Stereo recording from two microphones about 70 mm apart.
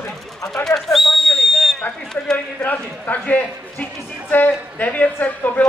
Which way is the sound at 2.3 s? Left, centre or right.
Left.